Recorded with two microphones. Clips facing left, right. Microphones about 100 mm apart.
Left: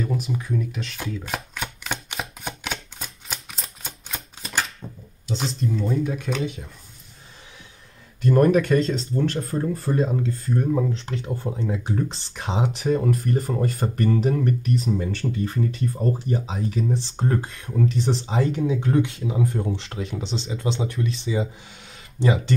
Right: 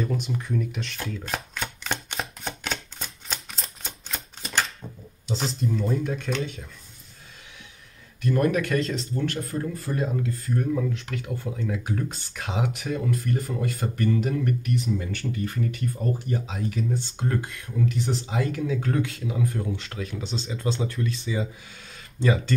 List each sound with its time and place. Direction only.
0.0 s shuffling cards: 5° left (ahead or behind)
5.2 s speech: centre (ahead or behind)
6.1 s speech: 10° left (ahead or behind)
8.2 s speech: 30° left (ahead or behind)